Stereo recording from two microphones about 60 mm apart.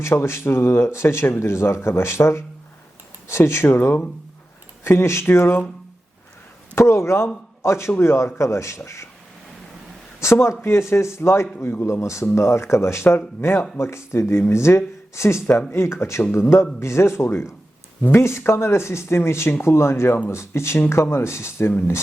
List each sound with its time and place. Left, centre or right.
0.0 s speech: left
6.7 s speech: left
10.2 s speech: left
13.1 s speech: left
13.7 s speech: left